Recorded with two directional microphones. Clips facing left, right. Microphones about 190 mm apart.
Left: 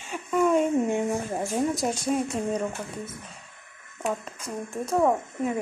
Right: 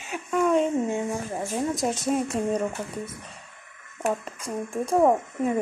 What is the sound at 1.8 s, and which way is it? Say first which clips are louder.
Speech: right 1 dB; centre (ahead or behind).